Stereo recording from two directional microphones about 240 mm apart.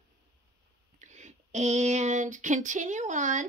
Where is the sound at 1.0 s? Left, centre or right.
Right.